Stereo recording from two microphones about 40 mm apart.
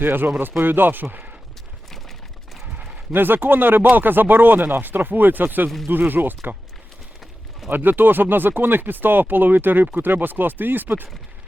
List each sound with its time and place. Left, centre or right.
0.0 s speech: right
3.1 s speech: right
7.7 s speech: right